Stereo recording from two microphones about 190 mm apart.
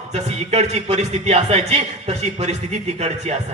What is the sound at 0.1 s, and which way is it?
A man's voice, 35° right (ahead or behind).